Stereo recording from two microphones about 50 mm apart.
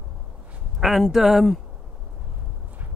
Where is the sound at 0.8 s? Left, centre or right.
Centre.